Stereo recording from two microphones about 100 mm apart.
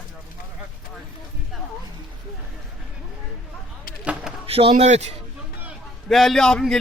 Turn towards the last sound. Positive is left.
turn(degrees=5)  # may be behind; listen again after turning